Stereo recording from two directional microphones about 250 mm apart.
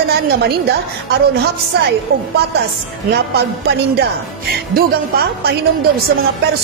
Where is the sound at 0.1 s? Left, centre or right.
Right.